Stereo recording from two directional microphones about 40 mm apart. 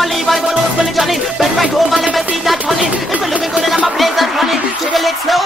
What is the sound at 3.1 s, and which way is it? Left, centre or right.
Chatter, right.